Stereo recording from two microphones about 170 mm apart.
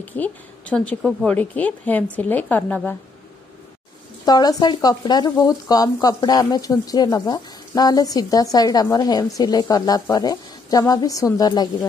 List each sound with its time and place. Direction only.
0.0 s a woman's voice: 10° left (ahead or behind)
4.3 s speech: 25° left (ahead or behind)